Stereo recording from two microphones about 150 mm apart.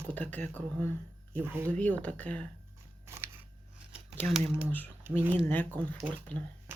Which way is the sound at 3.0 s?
15° right (ahead or behind).